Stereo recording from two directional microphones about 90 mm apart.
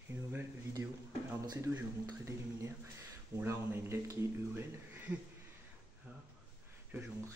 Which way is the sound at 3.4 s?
30° right (ahead or behind).